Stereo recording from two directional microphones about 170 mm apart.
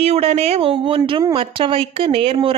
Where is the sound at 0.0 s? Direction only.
40° right (ahead or behind).